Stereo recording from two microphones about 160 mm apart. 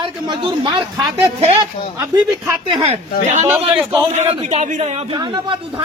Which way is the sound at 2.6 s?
35° right (ahead or behind).